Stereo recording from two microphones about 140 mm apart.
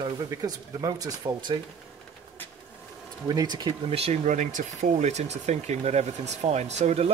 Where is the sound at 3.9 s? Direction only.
50° right (ahead or behind).